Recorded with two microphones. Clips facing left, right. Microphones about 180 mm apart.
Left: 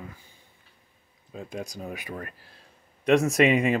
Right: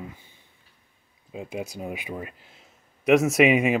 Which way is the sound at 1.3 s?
5° right (ahead or behind).